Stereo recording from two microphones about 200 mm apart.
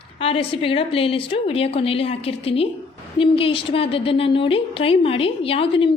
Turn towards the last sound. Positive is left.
turn(degrees=25)  # may be behind; listen again after turning